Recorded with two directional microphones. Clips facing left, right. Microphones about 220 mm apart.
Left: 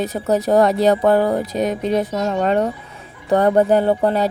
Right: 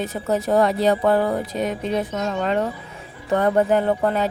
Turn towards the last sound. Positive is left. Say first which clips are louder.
# left 3 dB
turn(degrees=35)  # may be behind; listen again after turning